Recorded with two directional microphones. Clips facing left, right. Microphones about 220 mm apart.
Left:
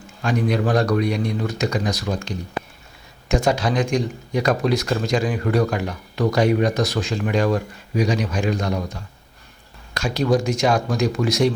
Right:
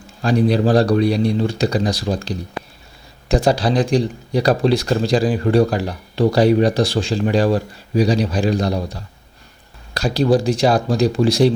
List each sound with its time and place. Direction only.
0.2 s speech: 35° right (ahead or behind)